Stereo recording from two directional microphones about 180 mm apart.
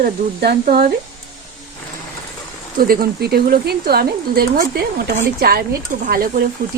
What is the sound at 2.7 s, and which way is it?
Speech, 55° right (ahead or behind).